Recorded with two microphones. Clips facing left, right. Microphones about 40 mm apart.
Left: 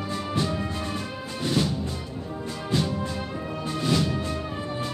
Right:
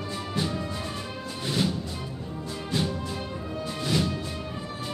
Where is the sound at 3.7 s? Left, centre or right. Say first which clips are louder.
Left 3 dB; centre.